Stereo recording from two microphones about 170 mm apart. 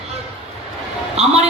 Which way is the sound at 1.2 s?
40° right (ahead or behind).